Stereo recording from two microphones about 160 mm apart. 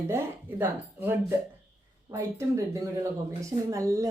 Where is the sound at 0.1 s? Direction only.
15° right (ahead or behind).